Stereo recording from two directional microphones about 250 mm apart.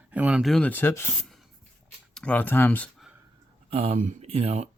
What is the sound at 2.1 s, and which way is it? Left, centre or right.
Speech, centre.